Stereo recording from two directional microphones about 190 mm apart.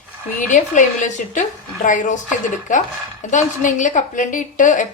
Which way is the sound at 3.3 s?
40° left (ahead or behind).